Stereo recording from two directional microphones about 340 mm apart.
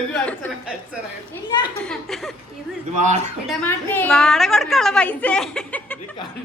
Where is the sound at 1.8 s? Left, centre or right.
Centre.